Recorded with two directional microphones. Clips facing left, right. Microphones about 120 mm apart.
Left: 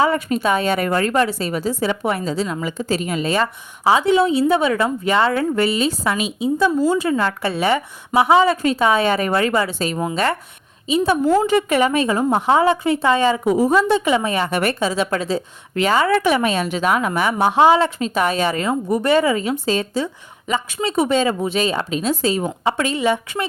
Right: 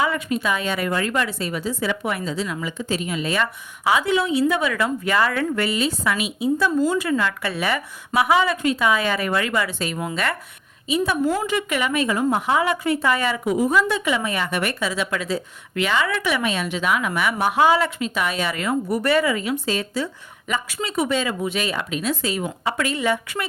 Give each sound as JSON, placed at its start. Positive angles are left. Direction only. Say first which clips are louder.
{"t": 0.0, "sound": "a woman's voice", "louder": "left 5 dB", "side_deg": 40}